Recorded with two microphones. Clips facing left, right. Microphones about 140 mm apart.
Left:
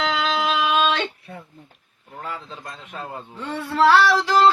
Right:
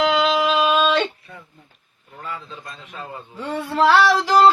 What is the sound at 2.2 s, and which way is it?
Speech, 45° left (ahead or behind).